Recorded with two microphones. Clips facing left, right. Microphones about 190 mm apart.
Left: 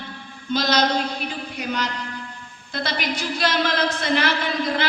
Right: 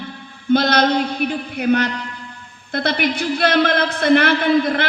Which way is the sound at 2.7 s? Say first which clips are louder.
Right 7 dB; 55° right (ahead or behind).